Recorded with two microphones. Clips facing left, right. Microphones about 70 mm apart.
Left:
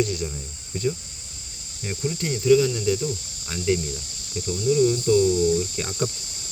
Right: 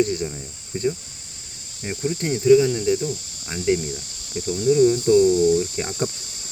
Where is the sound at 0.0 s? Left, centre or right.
Right.